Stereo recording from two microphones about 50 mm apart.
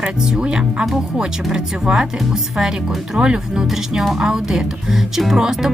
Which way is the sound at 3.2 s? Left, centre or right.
Centre.